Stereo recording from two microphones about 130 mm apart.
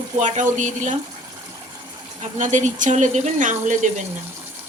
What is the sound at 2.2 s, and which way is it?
Speech, 70° right (ahead or behind).